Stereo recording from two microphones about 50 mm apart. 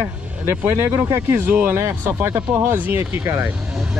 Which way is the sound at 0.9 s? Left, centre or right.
Right.